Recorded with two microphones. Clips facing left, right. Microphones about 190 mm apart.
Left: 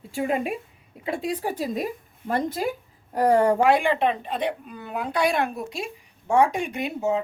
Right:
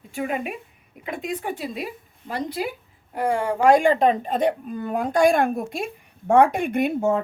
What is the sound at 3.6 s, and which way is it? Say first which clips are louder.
A woman's voice: right 4 dB; 45° right (ahead or behind).